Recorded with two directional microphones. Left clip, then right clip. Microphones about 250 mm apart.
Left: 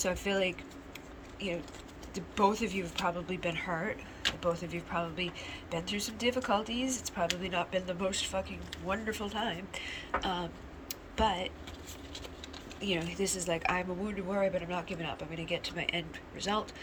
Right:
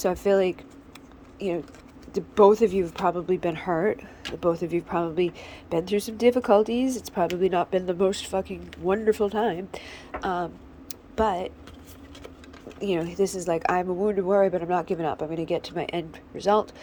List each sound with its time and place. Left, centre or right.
0.0 s speech: centre
2.1 s speech: right
12.8 s a woman's voice: centre